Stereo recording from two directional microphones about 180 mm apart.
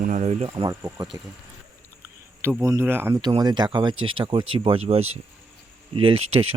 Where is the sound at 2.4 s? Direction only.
15° right (ahead or behind).